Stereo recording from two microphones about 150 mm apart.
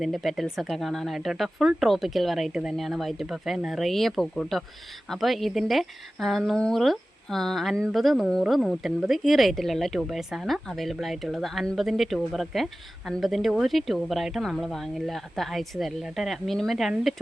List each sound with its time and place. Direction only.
0.0 s a woman's voice: centre (ahead or behind)